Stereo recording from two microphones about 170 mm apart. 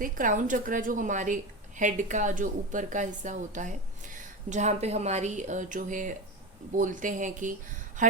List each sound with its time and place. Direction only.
0.0 s a woman's voice: 50° right (ahead or behind)